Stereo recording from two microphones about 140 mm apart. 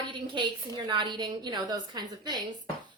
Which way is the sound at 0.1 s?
35° right (ahead or behind).